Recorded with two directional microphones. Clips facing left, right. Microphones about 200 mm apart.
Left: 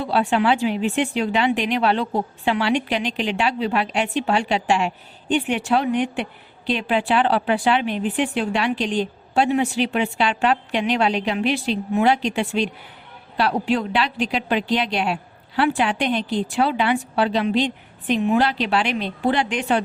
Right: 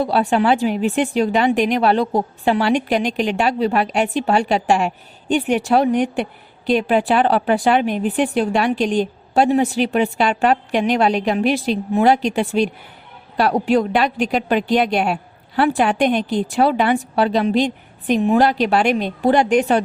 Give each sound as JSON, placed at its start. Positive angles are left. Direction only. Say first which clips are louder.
{"t": 0.0, "sound": "a woman's voice", "louder": "right 3 dB", "side_deg": -45}